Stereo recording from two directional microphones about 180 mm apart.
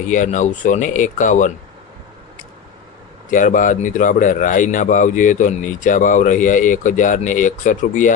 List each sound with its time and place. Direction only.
0.1 s speech: 45° left (ahead or behind)
3.2 s speech: 45° left (ahead or behind)